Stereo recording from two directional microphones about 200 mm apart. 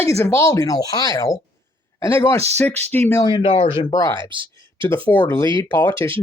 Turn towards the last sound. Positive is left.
turn(degrees=10)  # may be behind; listen again after turning